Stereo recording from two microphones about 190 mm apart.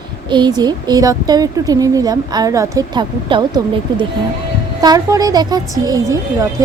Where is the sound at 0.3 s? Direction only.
25° right (ahead or behind).